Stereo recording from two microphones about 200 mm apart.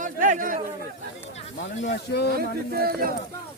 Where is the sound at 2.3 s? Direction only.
50° right (ahead or behind).